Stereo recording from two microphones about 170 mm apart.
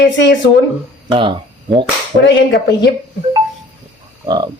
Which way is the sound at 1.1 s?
30° right (ahead or behind).